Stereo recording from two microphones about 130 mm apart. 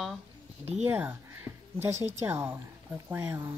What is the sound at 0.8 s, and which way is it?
Speech, 15° right (ahead or behind).